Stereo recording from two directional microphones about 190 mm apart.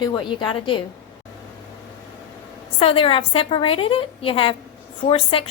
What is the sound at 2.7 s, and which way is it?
A woman's voice, 30° left (ahead or behind).